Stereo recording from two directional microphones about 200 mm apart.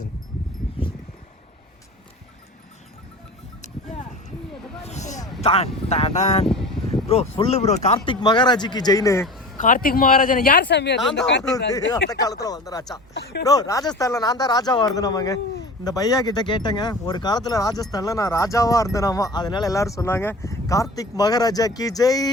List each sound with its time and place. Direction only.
3.6 s vehicle: 35° left (ahead or behind)
4.8 s a sound: 35° left (ahead or behind)
5.4 s speech: 30° left (ahead or behind)
6.5 s a sound: centre (ahead or behind)
6.9 s speech: 25° left (ahead or behind)
9.6 s speech: 40° left (ahead or behind); by 12.2 s 65° left (ahead or behind)
12.2 s speech: 20° left (ahead or behind)
13.1 s speech: 55° left (ahead or behind)
13.4 s speech: 15° left (ahead or behind)